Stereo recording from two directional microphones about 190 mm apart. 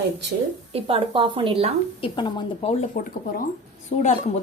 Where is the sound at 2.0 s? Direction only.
25° left (ahead or behind).